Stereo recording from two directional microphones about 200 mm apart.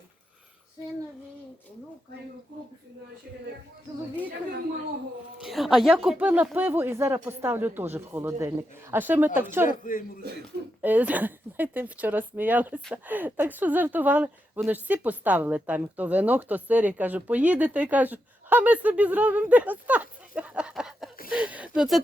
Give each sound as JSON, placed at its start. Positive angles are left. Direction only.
{"t": 5.4, "sound": "speech", "side_deg": 0}
{"t": 9.6, "sound": "speech", "side_deg": 45}
{"t": 10.8, "sound": "speech", "side_deg": -10}